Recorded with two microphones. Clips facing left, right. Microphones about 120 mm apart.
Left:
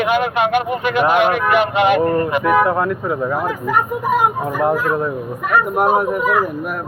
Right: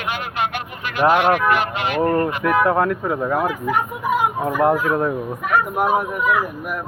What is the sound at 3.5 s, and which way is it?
Speech, 50° left (ahead or behind).